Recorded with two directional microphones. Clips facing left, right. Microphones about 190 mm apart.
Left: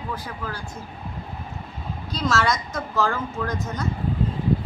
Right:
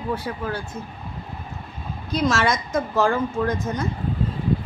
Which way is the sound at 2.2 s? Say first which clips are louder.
Right 2 dB; 20° right (ahead or behind).